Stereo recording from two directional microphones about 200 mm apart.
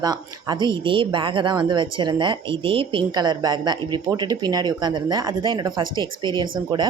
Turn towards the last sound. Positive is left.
turn(degrees=-20)  # may be behind; listen again after turning